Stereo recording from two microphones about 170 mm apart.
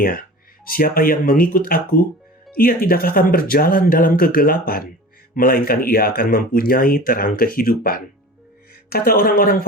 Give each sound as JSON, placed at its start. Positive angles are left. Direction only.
{"t": 0.0, "sound": "speech", "side_deg": 55}